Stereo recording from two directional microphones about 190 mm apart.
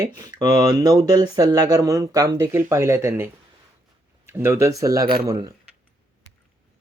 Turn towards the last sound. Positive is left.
turn(degrees=-20)  # may be behind; listen again after turning